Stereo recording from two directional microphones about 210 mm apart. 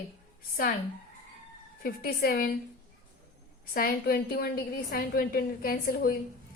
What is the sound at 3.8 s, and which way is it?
A woman's voice, 45° left (ahead or behind).